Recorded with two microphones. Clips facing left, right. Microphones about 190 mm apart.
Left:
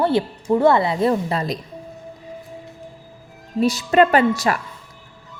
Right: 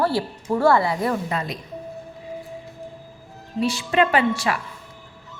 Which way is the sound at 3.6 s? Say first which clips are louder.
Left 5 dB; 40° left (ahead or behind).